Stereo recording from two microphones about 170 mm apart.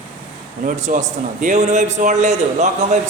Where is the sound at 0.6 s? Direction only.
50° right (ahead or behind).